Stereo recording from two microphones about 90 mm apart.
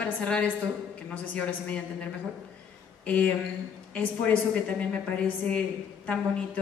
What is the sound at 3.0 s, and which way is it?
A woman's voice, 15° left (ahead or behind).